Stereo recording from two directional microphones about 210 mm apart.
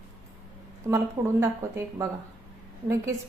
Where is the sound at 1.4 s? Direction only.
10° right (ahead or behind).